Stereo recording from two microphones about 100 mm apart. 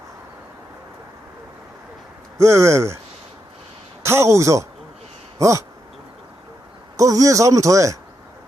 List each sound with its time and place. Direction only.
2.4 s speech: 30° right (ahead or behind)
4.0 s speech: 30° right (ahead or behind)
5.4 s a sound: 30° right (ahead or behind)
6.9 s speech: 35° right (ahead or behind)